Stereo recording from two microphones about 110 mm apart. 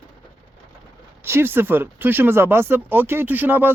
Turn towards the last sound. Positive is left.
turn(degrees=-15)  # may be behind; listen again after turning